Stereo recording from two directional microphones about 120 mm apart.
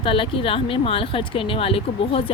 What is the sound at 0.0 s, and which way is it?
Speech, 45° left (ahead or behind).